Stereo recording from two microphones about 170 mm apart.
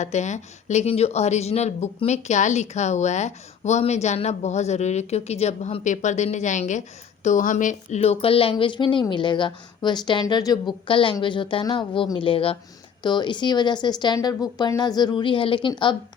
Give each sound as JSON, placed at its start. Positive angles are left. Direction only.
{"t": 0.0, "sound": "speech", "side_deg": 45}